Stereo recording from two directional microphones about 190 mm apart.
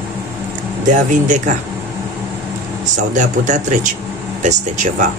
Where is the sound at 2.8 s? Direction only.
40° right (ahead or behind).